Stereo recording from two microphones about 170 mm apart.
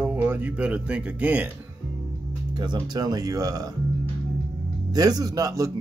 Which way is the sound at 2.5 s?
25° right (ahead or behind).